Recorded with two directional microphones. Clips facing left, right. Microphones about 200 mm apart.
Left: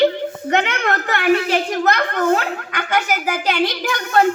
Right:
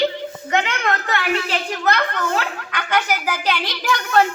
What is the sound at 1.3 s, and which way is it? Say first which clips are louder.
Speech: left 5 dB; 45° left (ahead or behind).